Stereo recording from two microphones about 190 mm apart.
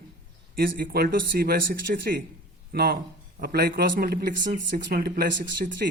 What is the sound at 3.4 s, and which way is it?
Speech, 50° right (ahead or behind).